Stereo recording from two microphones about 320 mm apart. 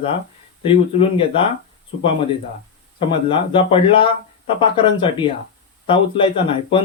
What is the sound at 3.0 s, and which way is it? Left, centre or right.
A man's voice, centre.